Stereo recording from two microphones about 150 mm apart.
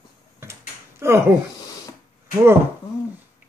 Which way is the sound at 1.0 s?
15° right (ahead or behind).